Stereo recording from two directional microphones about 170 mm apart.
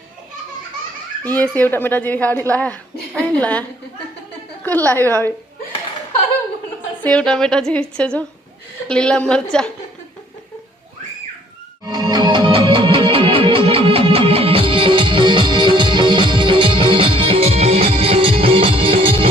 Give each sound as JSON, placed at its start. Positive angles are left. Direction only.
{"t": 1.3, "sound": "a child's voice", "side_deg": 10}
{"t": 7.0, "sound": "a woman's voice", "side_deg": 5}
{"t": 11.9, "sound": "music", "side_deg": -25}